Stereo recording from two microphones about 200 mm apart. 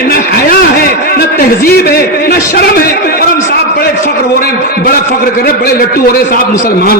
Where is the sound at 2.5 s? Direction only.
50° left (ahead or behind).